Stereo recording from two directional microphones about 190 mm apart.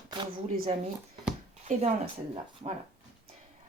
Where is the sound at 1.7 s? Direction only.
40° right (ahead or behind).